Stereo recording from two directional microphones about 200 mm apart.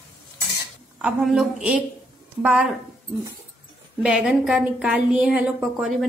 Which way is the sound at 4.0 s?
5° right (ahead or behind).